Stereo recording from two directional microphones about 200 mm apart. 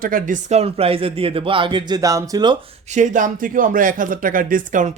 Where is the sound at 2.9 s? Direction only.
40° right (ahead or behind).